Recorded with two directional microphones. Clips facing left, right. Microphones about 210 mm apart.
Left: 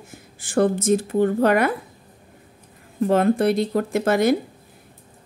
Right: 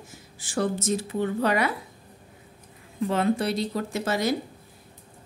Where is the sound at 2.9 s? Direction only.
50° left (ahead or behind).